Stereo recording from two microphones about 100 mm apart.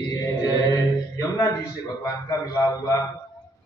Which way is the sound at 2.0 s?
35° left (ahead or behind).